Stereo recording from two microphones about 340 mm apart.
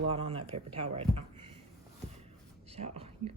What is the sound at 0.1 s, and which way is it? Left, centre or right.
Speech, centre.